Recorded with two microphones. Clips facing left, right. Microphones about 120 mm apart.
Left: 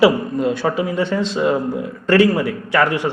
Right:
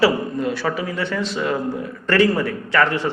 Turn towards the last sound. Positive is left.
turn(degrees=15)  # may be behind; listen again after turning